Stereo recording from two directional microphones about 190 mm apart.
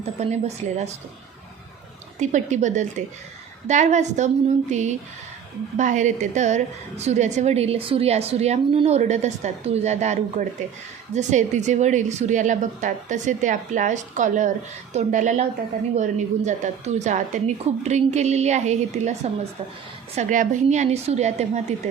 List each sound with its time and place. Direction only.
0.0 s a woman's voice: 35° right (ahead or behind)
2.1 s a woman's voice: 40° right (ahead or behind)